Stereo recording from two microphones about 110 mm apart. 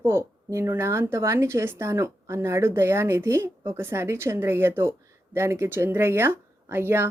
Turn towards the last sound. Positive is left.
turn(degrees=-20)  # may be behind; listen again after turning